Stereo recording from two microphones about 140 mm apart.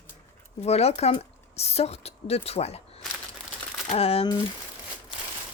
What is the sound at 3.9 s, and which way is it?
Speech, 45° left (ahead or behind).